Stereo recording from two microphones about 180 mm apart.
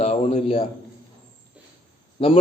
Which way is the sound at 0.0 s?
40° left (ahead or behind).